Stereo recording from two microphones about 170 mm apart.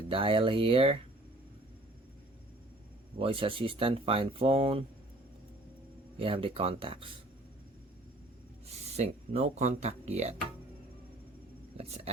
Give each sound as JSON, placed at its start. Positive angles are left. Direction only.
{"t": 0.1, "sound": "speech", "side_deg": -30}
{"t": 3.2, "sound": "speech", "side_deg": -30}
{"t": 6.1, "sound": "speech", "side_deg": -30}
{"t": 8.6, "sound": "speech", "side_deg": -40}
{"t": 11.8, "sound": "speech", "side_deg": -40}